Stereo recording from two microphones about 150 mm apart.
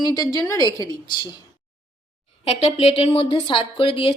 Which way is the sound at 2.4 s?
40° left (ahead or behind).